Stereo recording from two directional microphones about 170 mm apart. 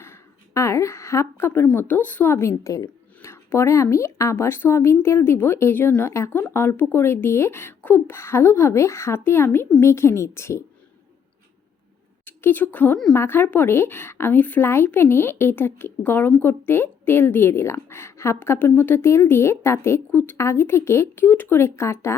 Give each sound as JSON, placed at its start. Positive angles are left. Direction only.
{"t": 0.0, "sound": "a woman's voice", "side_deg": 15}
{"t": 12.2, "sound": "a woman's voice", "side_deg": 10}